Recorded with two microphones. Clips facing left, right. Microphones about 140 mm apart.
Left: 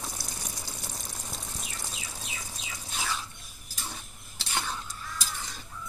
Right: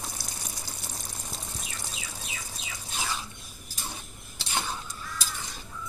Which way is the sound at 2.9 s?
10° right (ahead or behind).